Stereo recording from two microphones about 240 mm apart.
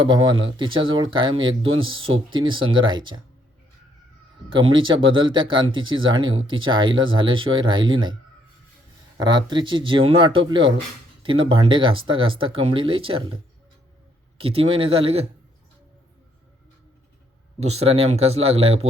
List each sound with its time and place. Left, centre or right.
0.0 s speech: centre
4.4 s speech: right
9.1 s speech: centre
17.6 s speech: right